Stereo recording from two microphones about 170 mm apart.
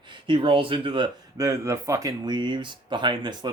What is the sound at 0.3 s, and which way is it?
Speech, 30° right (ahead or behind).